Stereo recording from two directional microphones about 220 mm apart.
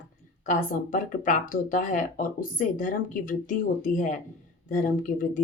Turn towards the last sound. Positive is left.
turn(degrees=35)  # may be behind; listen again after turning